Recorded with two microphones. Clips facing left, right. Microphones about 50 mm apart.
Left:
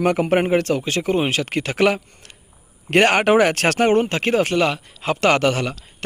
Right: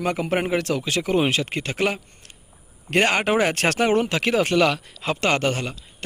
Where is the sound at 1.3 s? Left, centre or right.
Left.